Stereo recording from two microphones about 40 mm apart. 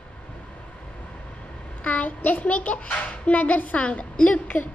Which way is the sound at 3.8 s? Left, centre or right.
Left.